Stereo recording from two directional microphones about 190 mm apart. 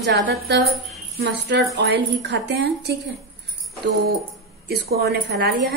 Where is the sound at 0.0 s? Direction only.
60° right (ahead or behind).